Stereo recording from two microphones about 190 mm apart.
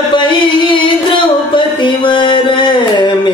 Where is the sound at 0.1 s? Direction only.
25° left (ahead or behind).